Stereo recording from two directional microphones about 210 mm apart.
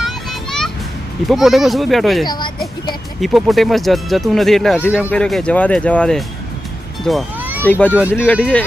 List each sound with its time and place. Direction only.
0.0 s children playing: centre (ahead or behind)
1.3 s speech: centre (ahead or behind)
2.2 s speech: 20° left (ahead or behind)
3.2 s speech: centre (ahead or behind)
7.0 s music: centre (ahead or behind)
7.6 s a child's voice: 10° left (ahead or behind)